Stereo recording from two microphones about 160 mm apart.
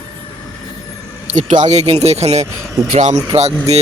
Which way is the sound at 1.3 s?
50° right (ahead or behind).